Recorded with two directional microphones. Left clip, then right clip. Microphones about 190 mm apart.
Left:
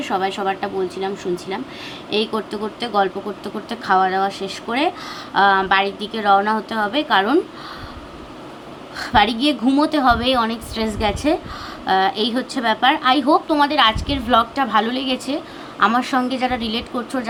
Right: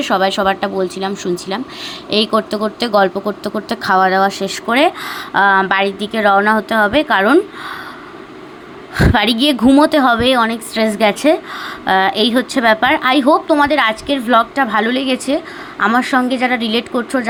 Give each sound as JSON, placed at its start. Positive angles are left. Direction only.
{"t": 0.0, "sound": "a woman's voice", "side_deg": -45}
{"t": 9.0, "sound": "a woman's voice", "side_deg": -35}